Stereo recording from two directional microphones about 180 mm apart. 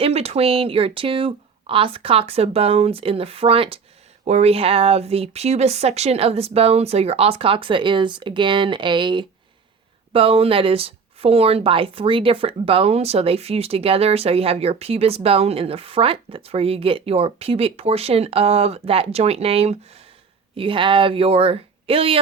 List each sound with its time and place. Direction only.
0.0 s speech: 35° right (ahead or behind)